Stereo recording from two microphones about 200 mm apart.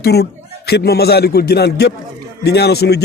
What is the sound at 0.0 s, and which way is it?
Speech, 55° left (ahead or behind).